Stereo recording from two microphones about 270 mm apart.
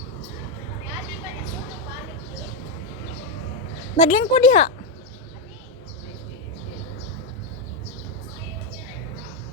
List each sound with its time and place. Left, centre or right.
3.9 s speech: left